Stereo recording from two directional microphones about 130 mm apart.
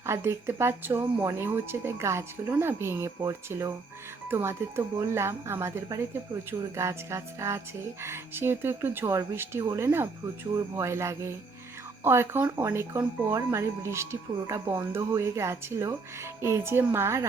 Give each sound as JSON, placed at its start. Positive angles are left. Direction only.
{"t": 0.0, "sound": "speech", "side_deg": -20}